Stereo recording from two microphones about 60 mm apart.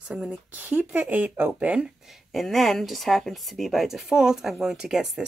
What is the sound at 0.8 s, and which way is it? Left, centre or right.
Speech, centre.